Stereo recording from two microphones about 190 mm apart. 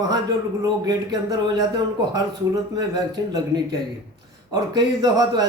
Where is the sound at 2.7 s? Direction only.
20° right (ahead or behind).